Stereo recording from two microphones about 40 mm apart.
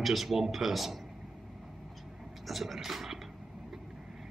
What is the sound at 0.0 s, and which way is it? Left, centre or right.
Speech, centre.